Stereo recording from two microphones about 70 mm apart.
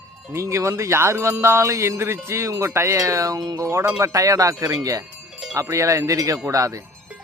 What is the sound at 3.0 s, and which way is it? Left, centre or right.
Music, right.